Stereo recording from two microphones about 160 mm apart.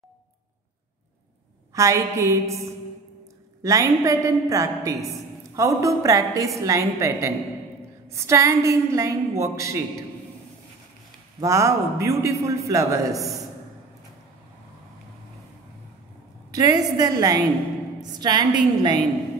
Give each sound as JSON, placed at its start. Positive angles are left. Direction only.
{"t": 1.7, "sound": "a man's voice", "side_deg": -20}
{"t": 11.3, "sound": "a man's voice", "side_deg": -20}
{"t": 16.5, "sound": "a man's voice", "side_deg": -25}